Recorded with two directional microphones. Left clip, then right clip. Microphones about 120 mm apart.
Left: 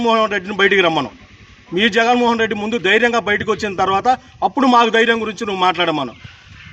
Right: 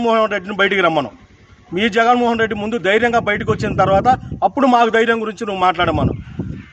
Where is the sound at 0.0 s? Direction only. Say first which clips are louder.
Even; 45° right (ahead or behind).